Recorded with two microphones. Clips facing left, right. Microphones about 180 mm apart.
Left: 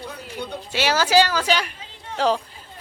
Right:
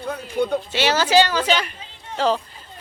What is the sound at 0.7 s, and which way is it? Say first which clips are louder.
A man's voice: even; 10° left (ahead or behind).